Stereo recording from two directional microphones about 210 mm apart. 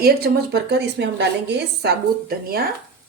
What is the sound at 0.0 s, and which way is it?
Speech, 50° right (ahead or behind).